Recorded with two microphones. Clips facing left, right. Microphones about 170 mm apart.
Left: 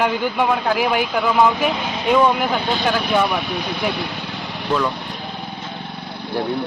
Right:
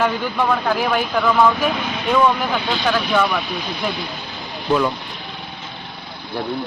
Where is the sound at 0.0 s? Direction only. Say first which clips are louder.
Left 1 dB; 15° left (ahead or behind).